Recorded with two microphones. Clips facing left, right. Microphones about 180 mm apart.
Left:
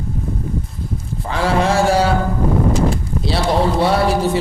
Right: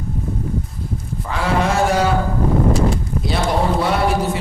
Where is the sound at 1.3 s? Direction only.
30° left (ahead or behind).